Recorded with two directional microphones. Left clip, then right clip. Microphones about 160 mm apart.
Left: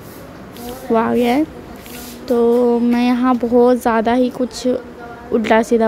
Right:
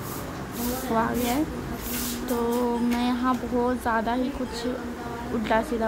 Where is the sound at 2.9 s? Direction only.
35° left (ahead or behind).